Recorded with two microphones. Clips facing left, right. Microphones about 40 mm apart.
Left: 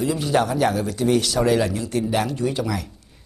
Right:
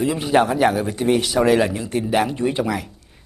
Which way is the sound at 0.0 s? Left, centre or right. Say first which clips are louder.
Right 3 dB; right.